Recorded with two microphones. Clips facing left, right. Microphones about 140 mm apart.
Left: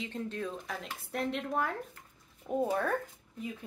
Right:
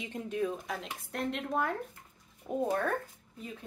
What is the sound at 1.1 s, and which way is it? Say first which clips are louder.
Speech: even; centre (ahead or behind).